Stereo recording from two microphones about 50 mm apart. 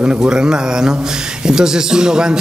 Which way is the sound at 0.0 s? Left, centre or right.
Centre.